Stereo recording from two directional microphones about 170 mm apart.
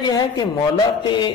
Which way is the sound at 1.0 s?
25° left (ahead or behind).